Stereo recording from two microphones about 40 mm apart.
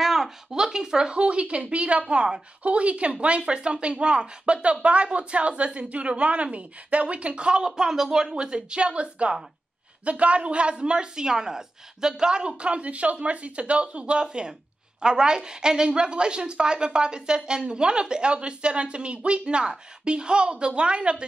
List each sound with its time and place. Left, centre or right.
0.0 s speech: centre
2.6 s a woman's voice: right